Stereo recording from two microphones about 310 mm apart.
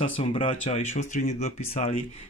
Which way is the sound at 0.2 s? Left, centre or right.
Centre.